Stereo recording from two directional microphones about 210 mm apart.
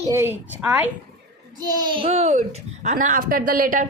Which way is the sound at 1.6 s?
20° right (ahead or behind).